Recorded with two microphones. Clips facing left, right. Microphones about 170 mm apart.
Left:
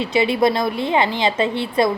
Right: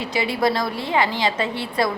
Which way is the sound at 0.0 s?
25° left (ahead or behind).